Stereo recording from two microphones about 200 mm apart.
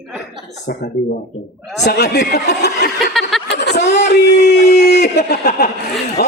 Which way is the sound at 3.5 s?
60° left (ahead or behind).